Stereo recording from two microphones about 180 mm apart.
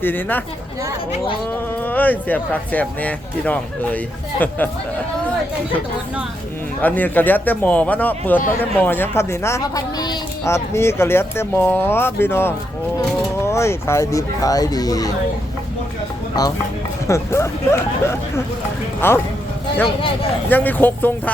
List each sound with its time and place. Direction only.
0.0 s speech: 10° left (ahead or behind)
1.8 s speech: 10° left (ahead or behind)
6.8 s speech: 10° left (ahead or behind)
17.1 s speech: 15° left (ahead or behind)
20.5 s speech: 10° left (ahead or behind)